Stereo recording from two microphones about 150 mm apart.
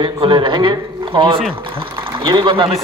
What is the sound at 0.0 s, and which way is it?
A man's voice, 30° right (ahead or behind).